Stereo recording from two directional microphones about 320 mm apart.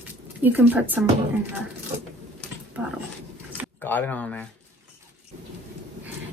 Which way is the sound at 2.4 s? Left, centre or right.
Centre.